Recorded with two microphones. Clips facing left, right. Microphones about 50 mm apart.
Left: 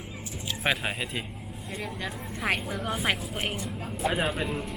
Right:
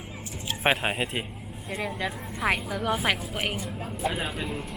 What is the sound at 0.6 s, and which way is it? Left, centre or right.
Speech, right.